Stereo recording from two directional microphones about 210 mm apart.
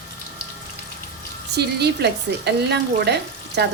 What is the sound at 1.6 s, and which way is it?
Speech, 50° right (ahead or behind).